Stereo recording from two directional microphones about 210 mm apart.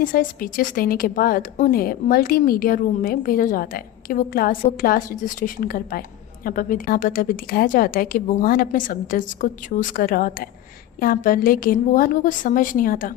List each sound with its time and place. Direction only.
0.0 s a woman's voice: 40° left (ahead or behind)